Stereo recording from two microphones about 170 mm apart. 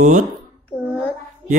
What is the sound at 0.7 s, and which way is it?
Child singing, 15° left (ahead or behind).